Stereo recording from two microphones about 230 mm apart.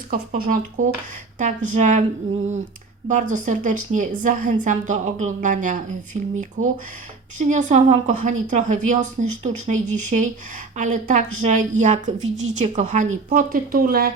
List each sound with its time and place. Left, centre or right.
0.1 s a woman's voice: right
3.1 s a woman's voice: right